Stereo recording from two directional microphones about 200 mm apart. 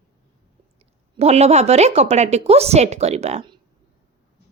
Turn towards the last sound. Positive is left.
turn(degrees=-30)  # may be behind; listen again after turning